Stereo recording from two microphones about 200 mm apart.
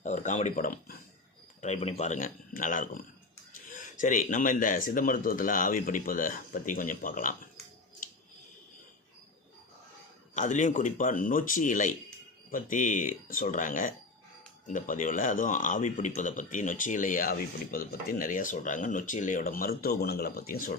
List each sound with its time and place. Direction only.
0.0 s speech: 35° left (ahead or behind)
1.6 s speech: 30° left (ahead or behind)
10.3 s speech: 40° left (ahead or behind)